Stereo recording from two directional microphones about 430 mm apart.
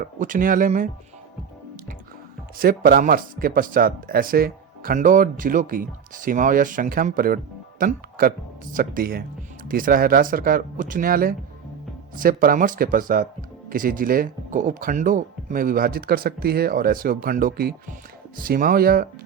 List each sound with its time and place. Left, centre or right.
0.0 s speech: centre
2.6 s speech: centre